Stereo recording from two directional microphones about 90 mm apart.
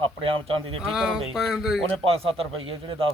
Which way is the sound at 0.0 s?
90° right.